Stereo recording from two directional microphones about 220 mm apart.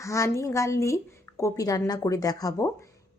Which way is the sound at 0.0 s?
15° left (ahead or behind).